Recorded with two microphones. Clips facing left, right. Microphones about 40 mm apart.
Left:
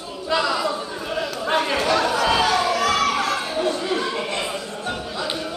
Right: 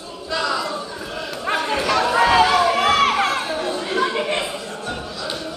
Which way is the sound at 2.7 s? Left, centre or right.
Right.